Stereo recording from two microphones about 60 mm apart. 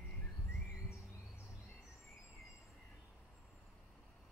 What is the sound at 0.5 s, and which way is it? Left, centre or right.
Bird, left.